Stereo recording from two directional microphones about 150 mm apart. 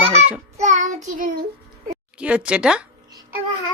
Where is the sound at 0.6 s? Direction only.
55° right (ahead or behind).